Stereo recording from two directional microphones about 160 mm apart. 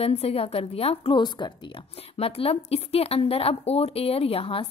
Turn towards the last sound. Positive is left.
turn(degrees=35)  # may be behind; listen again after turning